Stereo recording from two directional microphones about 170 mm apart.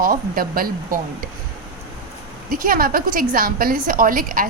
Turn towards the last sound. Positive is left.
turn(degrees=-55)  # may be behind; listen again after turning